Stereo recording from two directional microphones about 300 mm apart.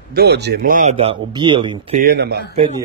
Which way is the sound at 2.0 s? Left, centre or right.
Right.